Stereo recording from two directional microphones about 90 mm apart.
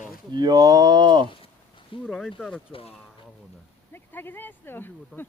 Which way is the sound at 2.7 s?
90° left.